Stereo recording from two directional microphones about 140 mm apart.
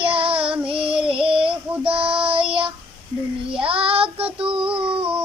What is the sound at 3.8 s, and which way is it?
Child singing, 40° right (ahead or behind).